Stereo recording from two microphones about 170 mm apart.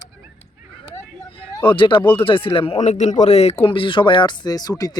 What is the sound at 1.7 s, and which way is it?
Speech, 30° left (ahead or behind).